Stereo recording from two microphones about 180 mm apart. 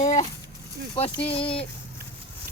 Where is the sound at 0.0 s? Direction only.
40° left (ahead or behind).